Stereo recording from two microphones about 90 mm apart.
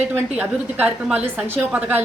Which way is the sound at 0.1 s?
15° right (ahead or behind).